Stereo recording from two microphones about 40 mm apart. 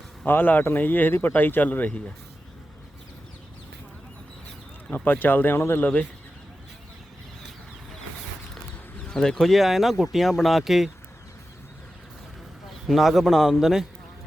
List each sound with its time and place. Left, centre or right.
0.3 s speech: left
5.0 s speech: left
9.0 s speech: centre
9.5 s speech: centre
12.9 s a man's voice: centre